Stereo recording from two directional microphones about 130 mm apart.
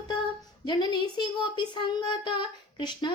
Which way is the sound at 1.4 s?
35° left (ahead or behind).